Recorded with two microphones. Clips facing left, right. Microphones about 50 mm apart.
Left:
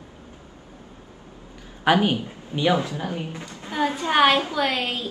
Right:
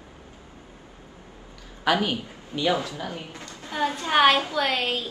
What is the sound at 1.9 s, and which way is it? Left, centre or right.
Speech, left.